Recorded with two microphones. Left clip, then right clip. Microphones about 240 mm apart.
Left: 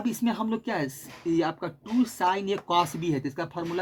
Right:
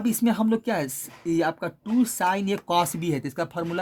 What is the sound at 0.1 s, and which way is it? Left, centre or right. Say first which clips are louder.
Speech: right 7 dB; right.